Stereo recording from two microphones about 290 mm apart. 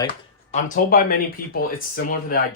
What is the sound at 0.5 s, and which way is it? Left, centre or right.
Speech, left.